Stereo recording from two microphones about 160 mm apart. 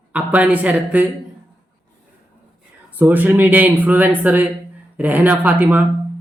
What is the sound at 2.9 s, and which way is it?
A man's voice, 10° right (ahead or behind).